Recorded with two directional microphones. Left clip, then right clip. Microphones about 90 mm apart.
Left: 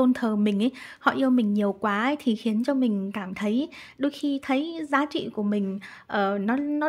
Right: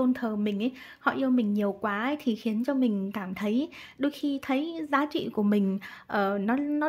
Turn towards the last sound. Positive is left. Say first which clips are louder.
# left 2 dB
turn(degrees=10)  # may be behind; listen again after turning